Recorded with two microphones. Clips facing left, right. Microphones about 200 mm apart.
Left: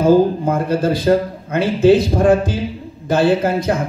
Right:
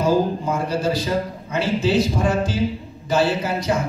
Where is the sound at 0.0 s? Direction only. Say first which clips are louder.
Left 7 dB; 55° left (ahead or behind).